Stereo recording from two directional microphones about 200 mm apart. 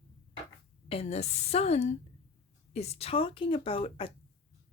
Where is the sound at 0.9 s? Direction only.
30° left (ahead or behind).